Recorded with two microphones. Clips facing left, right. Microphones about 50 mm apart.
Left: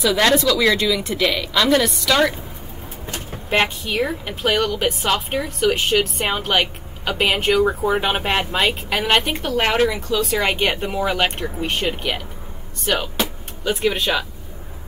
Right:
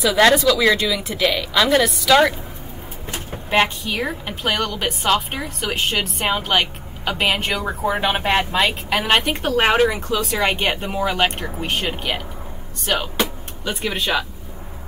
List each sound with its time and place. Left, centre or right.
0.0 s speech: centre
10.2 s speech: centre